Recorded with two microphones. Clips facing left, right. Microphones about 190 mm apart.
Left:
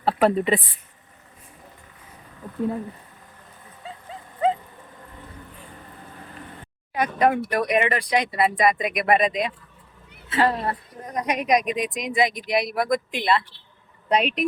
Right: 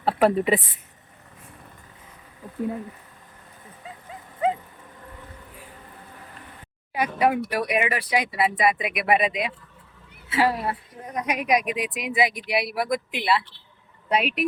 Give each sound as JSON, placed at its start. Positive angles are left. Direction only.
{"t": 0.0, "sound": "speech", "side_deg": -5}
{"t": 3.8, "sound": "dog", "side_deg": 30}
{"t": 6.9, "sound": "speech", "side_deg": -10}